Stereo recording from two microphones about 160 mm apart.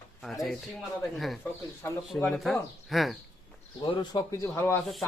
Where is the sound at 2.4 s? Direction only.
Centre (ahead or behind).